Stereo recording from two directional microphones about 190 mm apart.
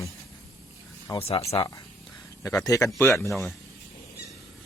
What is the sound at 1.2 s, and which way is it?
Speech, 30° left (ahead or behind).